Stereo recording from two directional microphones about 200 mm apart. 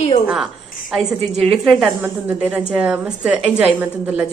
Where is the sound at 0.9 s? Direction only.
Centre (ahead or behind).